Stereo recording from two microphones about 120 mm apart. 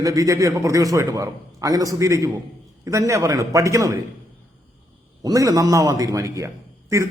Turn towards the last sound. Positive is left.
turn(degrees=-25)  # may be behind; listen again after turning